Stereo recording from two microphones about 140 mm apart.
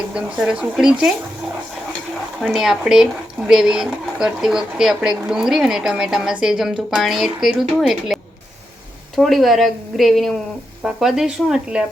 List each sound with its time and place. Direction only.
0.0 s speech: 5° right (ahead or behind)
2.4 s speech: 5° right (ahead or behind)